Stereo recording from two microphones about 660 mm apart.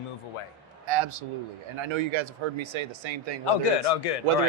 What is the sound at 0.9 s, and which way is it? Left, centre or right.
A man's voice, right.